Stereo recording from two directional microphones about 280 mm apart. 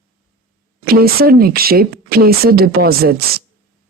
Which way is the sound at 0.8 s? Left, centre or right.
Right.